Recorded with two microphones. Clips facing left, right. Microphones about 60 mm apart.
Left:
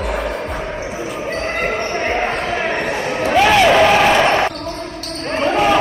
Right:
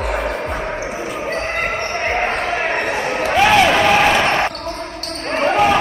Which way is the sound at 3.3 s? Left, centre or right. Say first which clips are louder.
Left 2 dB; centre.